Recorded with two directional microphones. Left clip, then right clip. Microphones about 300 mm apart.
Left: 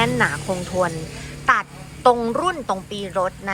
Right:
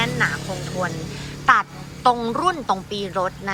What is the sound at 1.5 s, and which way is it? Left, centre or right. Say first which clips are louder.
A woman's voice: right 2 dB; centre.